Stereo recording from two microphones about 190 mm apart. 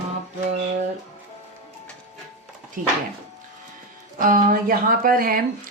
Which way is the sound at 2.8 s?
45° right (ahead or behind).